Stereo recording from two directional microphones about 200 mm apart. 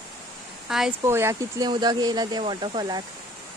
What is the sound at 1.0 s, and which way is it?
Speech, 15° right (ahead or behind).